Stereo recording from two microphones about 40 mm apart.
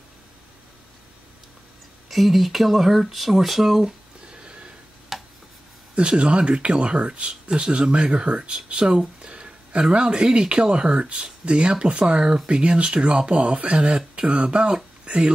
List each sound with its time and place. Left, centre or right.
2.0 s speech: centre
3.8 s a sound: right
5.1 s tick: centre
5.9 s speech: right